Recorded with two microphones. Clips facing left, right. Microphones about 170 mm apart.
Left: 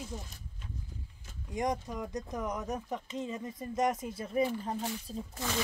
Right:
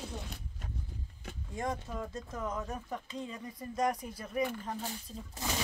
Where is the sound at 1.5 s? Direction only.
15° left (ahead or behind).